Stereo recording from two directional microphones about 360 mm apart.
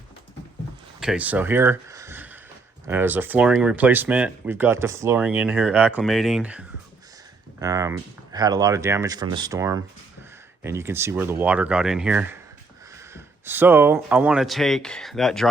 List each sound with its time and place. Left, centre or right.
0.9 s a sound: centre
2.8 s speech: centre
7.6 s speech: centre